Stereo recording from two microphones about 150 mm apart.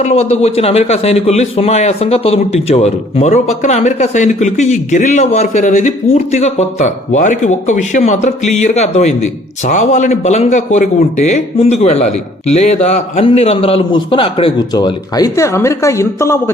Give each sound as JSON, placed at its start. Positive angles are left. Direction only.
{"t": 0.0, "sound": "a man's voice", "side_deg": 45}